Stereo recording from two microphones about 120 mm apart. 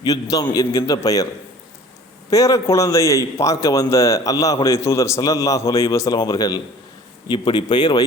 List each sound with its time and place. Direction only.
0.0 s a man's voice: 30° left (ahead or behind)
2.3 s a man's voice: 25° left (ahead or behind)